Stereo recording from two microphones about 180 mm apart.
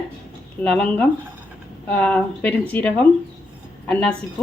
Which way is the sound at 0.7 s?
10° left (ahead or behind).